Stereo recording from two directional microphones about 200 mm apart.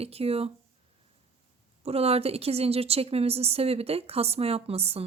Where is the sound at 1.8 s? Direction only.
30° right (ahead or behind).